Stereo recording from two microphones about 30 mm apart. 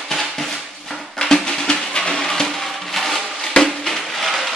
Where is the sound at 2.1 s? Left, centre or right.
Centre.